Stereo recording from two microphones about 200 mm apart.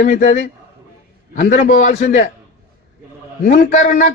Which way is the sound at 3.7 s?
40° left (ahead or behind).